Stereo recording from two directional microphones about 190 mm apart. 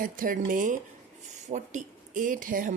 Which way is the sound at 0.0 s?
45° right (ahead or behind).